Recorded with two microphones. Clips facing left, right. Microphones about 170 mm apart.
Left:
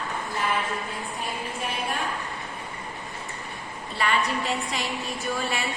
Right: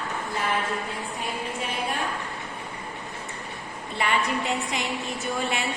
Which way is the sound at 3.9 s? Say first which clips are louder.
Even; 20° right (ahead or behind).